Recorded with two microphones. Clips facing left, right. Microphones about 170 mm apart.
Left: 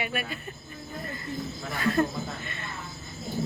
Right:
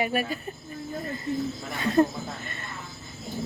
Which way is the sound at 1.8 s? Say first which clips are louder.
Right 3 dB; 25° right (ahead or behind).